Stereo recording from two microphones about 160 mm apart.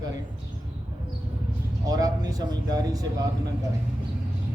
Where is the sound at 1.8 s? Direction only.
25° right (ahead or behind).